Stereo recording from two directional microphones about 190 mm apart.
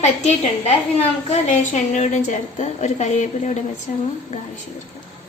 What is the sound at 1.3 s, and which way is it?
A woman's voice, 35° left (ahead or behind).